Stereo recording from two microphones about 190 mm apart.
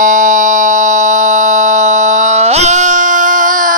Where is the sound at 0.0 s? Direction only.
40° right (ahead or behind).